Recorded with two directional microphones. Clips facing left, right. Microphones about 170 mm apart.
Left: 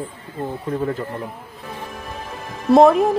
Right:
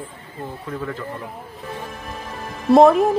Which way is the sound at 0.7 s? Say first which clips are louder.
Left 6 dB; 35° left (ahead or behind).